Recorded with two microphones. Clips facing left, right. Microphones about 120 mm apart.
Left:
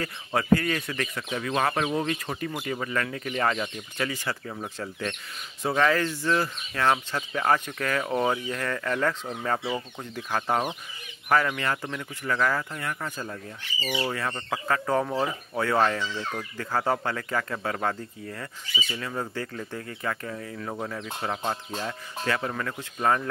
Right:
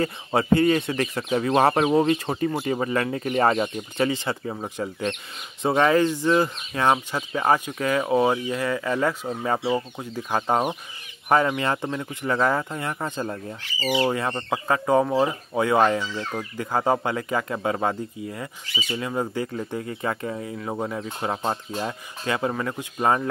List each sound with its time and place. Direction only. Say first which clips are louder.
0.0 s speech: right 5 dB; 25° right (ahead or behind)
9.6 s speech: right 6 dB; 25° right (ahead or behind)